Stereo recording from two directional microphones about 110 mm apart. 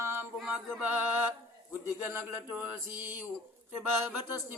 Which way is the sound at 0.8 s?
15° right (ahead or behind).